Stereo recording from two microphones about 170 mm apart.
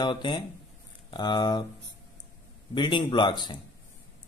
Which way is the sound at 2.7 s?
30° left (ahead or behind).